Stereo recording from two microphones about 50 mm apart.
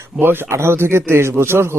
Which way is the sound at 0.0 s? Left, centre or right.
Right.